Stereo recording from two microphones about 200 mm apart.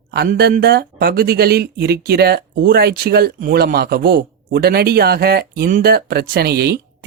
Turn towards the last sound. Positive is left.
turn(degrees=-55)  # may be behind; listen again after turning